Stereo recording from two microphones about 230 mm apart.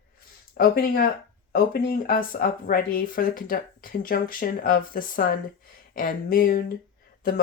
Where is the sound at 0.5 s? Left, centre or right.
Left.